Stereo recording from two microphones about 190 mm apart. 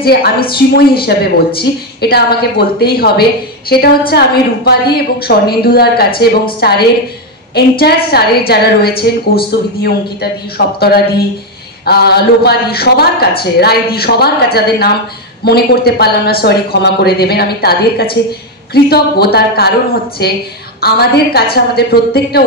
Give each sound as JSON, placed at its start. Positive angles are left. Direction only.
{"t": 0.0, "sound": "a man's voice", "side_deg": 55}